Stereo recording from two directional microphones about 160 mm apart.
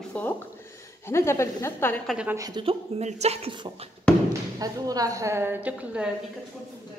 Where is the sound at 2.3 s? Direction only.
25° right (ahead or behind); by 3.7 s 40° right (ahead or behind).